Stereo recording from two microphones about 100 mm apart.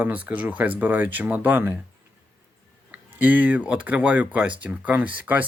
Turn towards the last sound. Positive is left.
turn(degrees=-15)  # may be behind; listen again after turning